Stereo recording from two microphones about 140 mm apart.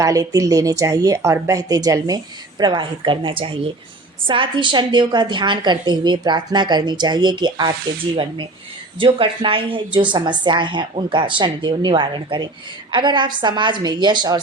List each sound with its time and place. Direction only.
0.0 s a woman's voice: 25° right (ahead or behind)
9.0 s a woman's voice: 40° right (ahead or behind)